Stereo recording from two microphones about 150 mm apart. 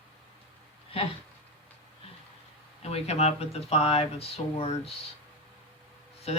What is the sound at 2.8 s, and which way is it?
Speech, 45° left (ahead or behind).